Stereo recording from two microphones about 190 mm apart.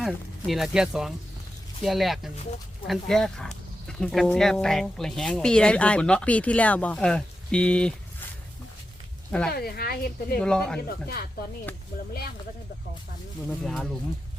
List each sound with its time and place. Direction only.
0.0 s speech: centre (ahead or behind)
9.5 s speech: 55° left (ahead or behind)
10.4 s speech: 5° left (ahead or behind)
10.8 s speech: 55° left (ahead or behind)
13.5 s speech: centre (ahead or behind)